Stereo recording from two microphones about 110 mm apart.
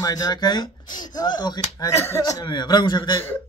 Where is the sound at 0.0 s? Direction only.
35° left (ahead or behind).